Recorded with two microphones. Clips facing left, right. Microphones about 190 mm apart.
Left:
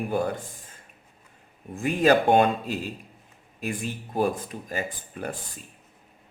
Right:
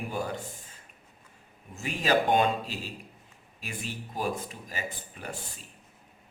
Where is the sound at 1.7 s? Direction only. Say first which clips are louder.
Left 6 dB; 55° left (ahead or behind).